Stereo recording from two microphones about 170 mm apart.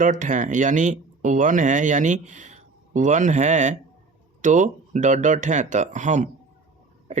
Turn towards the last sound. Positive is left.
turn(degrees=-45)  # may be behind; listen again after turning